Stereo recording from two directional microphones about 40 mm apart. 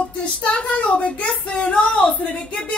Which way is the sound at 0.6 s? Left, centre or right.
Left.